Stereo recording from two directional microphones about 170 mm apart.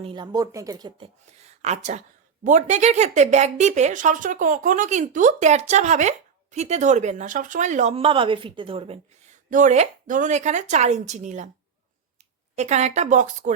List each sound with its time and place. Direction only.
0.0 s speech: 25° right (ahead or behind)
9.5 s speech: 45° right (ahead or behind)
12.5 s speech: 40° right (ahead or behind)